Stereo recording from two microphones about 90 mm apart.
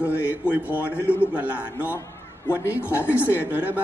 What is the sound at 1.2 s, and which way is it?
Speech, 15° right (ahead or behind).